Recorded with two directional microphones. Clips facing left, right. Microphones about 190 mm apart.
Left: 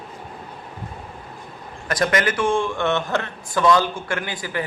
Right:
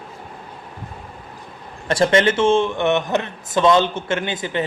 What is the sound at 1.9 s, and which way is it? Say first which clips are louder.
A man's voice: right 5 dB; 30° right (ahead or behind).